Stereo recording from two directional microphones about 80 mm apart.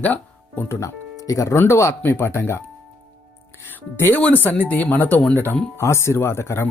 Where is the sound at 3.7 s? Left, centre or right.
Left.